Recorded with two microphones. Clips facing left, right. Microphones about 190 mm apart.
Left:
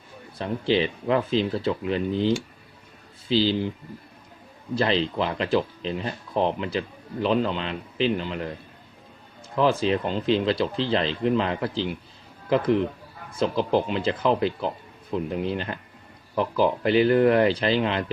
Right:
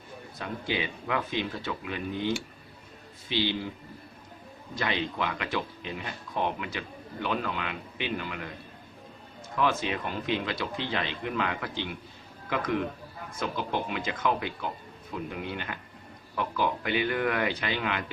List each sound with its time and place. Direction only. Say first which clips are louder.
0.3 s speech: left 9 dB; 30° left (ahead or behind)
4.7 s speech: left 8 dB; 30° left (ahead or behind)
9.6 s speech: left 7 dB; 30° left (ahead or behind)